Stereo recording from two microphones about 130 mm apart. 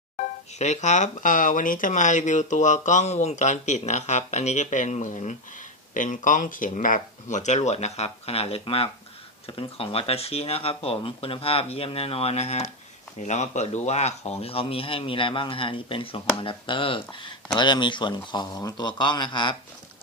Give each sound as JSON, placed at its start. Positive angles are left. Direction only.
{"t": 0.2, "sound": "speech", "side_deg": 65}
{"t": 5.9, "sound": "a man's voice", "side_deg": 85}